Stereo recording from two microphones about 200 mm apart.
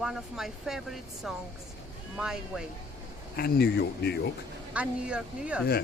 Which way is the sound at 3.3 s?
50° left (ahead or behind).